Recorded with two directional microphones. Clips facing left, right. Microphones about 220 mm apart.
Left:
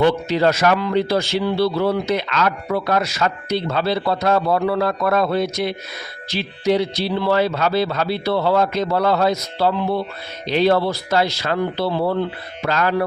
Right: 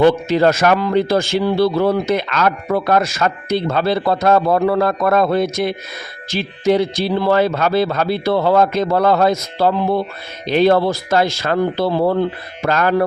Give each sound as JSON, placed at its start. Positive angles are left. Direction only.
{"t": 0.0, "sound": "speech", "side_deg": -50}